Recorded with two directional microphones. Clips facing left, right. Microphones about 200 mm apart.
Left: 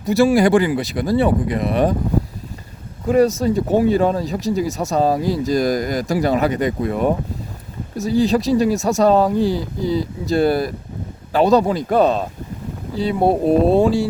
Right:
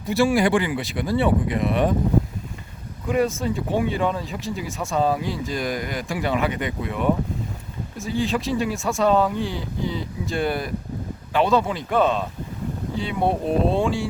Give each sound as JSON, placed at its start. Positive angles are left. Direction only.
{"t": 0.0, "sound": "speech", "side_deg": 40}
{"t": 3.1, "sound": "speech", "side_deg": 40}